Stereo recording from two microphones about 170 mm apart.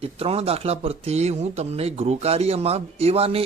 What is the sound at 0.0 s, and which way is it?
Speech, 35° right (ahead or behind).